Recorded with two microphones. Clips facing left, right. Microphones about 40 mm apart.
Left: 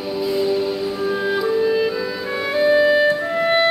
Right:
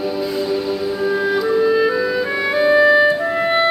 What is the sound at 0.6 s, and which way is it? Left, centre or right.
Music, centre.